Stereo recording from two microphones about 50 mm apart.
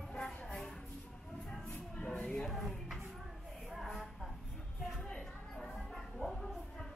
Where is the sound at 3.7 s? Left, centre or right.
Centre.